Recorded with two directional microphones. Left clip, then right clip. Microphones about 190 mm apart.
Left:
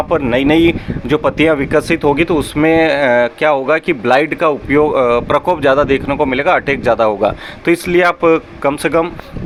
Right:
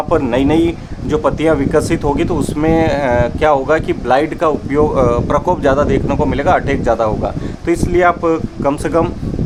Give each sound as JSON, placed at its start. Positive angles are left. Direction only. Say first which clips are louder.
{"t": 0.1, "sound": "speech", "louder": "even", "side_deg": 10}